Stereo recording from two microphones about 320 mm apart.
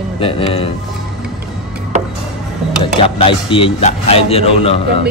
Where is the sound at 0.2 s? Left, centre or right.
Centre.